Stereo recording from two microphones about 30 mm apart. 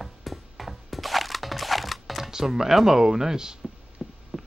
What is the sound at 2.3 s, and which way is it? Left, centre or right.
Speech, centre.